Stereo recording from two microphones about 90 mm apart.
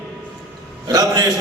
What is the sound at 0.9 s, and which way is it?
Speech, 45° right (ahead or behind).